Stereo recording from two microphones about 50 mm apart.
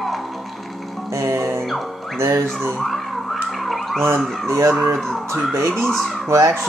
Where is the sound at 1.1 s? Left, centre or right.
Right.